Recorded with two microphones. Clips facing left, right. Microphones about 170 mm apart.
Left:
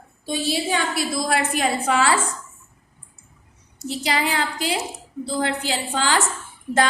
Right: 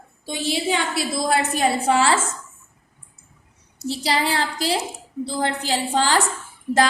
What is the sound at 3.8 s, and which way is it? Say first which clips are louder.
A woman's voice: right 1 dB; 35° right (ahead or behind).